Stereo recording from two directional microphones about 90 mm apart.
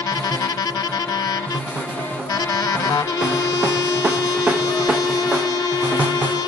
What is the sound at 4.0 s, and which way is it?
Music, 10° right (ahead or behind).